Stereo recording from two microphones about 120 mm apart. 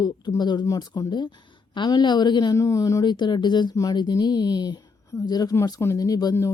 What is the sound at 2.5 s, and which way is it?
Speech, 25° left (ahead or behind).